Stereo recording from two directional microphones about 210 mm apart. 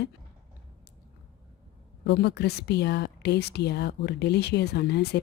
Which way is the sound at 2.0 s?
50° left (ahead or behind).